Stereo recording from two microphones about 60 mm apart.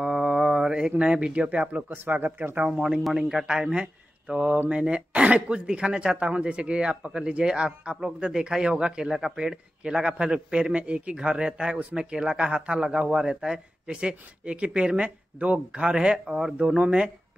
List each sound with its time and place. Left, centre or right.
0.0 s mantra: centre
1.9 s speech: right
3.0 s speech: centre